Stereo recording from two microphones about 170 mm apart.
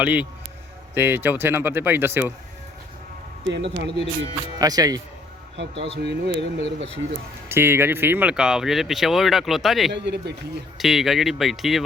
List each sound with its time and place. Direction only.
0.0 s speech: 10° right (ahead or behind)
3.5 s speech: 90° right
4.5 s speech: 20° right (ahead or behind)
5.5 s speech: 90° right
7.4 s speech: 15° right (ahead or behind)
9.9 s speech: 90° right
10.8 s speech: centre (ahead or behind)